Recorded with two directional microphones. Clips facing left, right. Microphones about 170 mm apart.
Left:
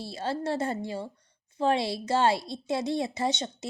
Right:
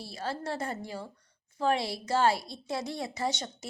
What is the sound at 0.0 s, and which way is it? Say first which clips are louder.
Speech: left 5 dB; 25° left (ahead or behind).